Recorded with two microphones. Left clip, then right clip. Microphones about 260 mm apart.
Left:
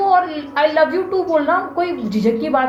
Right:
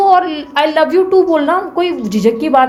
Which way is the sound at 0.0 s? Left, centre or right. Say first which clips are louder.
Right 5 dB; right.